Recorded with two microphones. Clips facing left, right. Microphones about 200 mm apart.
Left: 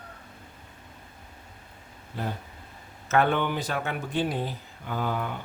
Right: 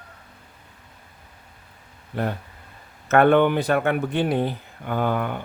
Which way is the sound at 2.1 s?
65° right (ahead or behind).